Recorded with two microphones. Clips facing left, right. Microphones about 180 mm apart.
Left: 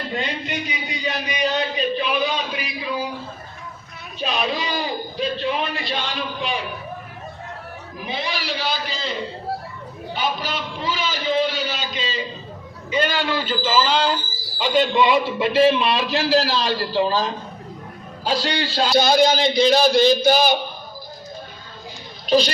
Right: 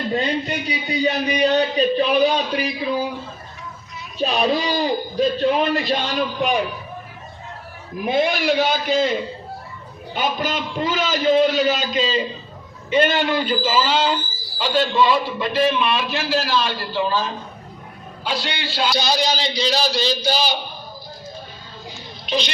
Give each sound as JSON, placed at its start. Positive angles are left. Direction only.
{"t": 0.2, "sound": "a man's voice", "side_deg": -40}
{"t": 4.2, "sound": "a man's voice", "side_deg": -40}
{"t": 8.0, "sound": "a man's voice", "side_deg": -50}
{"t": 10.2, "sound": "a man's voice", "side_deg": -50}
{"t": 13.1, "sound": "speech", "side_deg": -20}
{"t": 14.6, "sound": "a man's voice", "side_deg": 15}
{"t": 18.9, "sound": "speech", "side_deg": 50}
{"t": 22.3, "sound": "speech", "side_deg": 35}